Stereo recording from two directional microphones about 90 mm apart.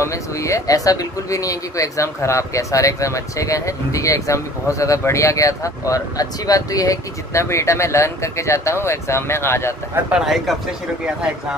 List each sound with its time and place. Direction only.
0.0 s speech: 35° left (ahead or behind)
10.1 s speech: centre (ahead or behind)